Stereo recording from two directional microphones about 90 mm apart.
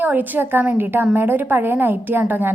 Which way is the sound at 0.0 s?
20° right (ahead or behind).